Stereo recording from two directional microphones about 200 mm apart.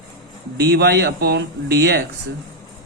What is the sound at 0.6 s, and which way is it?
Speech, 55° right (ahead or behind).